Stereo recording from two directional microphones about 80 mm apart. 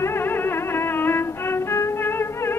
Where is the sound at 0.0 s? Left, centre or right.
Left.